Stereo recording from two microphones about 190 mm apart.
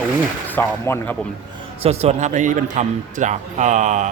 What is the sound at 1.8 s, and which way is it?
A man's voice, 35° right (ahead or behind).